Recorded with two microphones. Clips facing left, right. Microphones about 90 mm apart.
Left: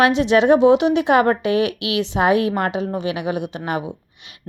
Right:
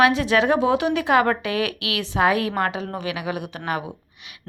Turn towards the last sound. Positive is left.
turn(degrees=25)  # may be behind; listen again after turning